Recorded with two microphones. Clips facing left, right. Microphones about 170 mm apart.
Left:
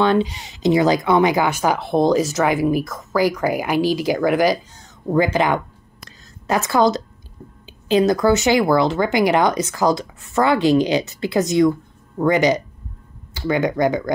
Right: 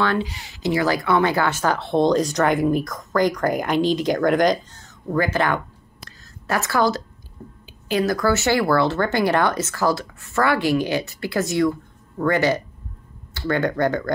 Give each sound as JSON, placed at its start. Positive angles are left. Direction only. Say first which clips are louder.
{"t": 0.0, "sound": "speech", "louder": "left 5 dB", "side_deg": 20}
{"t": 5.0, "sound": "speech", "louder": "left 4 dB", "side_deg": 20}
{"t": 6.0, "sound": "a sound", "louder": "left 4 dB", "side_deg": 20}
{"t": 7.6, "sound": "speech", "louder": "left 5 dB", "side_deg": 20}